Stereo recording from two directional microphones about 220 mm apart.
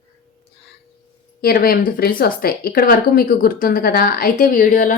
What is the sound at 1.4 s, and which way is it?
Speech, 45° left (ahead or behind).